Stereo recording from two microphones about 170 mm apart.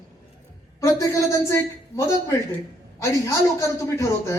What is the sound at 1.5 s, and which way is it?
Speech, 15° left (ahead or behind).